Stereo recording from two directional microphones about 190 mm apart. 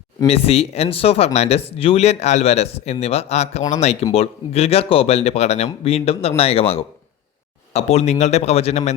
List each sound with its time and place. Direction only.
0.3 s speech: 30° left (ahead or behind)